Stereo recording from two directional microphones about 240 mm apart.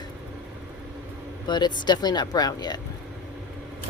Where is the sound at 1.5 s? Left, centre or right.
Centre.